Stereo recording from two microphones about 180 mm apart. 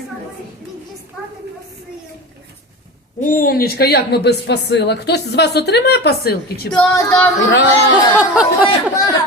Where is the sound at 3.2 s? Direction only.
50° left (ahead or behind).